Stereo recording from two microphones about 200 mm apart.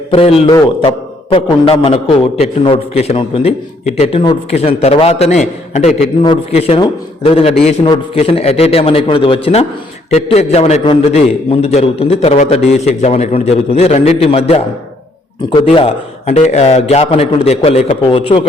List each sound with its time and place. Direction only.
0.1 s a man's voice: 30° left (ahead or behind)